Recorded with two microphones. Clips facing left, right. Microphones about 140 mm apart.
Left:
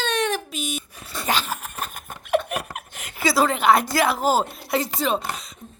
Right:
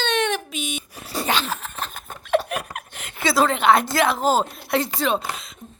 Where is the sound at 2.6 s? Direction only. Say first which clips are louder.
Right 1 dB; 45° left (ahead or behind).